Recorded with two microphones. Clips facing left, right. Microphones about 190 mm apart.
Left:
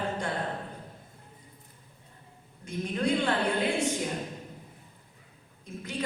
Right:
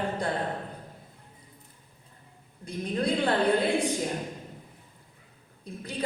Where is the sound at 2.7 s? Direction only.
35° right (ahead or behind).